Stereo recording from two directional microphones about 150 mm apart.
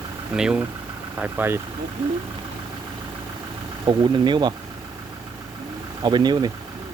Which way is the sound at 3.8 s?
30° right (ahead or behind).